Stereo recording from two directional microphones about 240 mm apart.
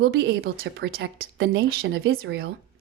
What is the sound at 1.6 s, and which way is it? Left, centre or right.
Speech, right.